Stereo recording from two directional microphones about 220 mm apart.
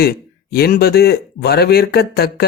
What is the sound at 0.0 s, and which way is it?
Speech, 45° left (ahead or behind).